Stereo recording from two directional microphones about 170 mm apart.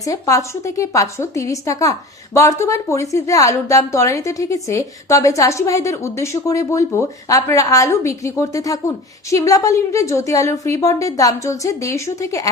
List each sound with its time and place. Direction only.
0.0 s a woman's voice: 20° left (ahead or behind)